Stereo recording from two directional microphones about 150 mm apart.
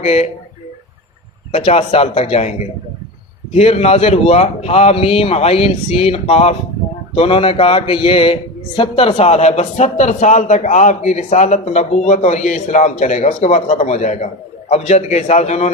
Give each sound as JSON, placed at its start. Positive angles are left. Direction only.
{"t": 0.0, "sound": "a man's voice", "side_deg": 45}
{"t": 1.5, "sound": "a man's voice", "side_deg": 40}
{"t": 3.5, "sound": "a man's voice", "side_deg": 40}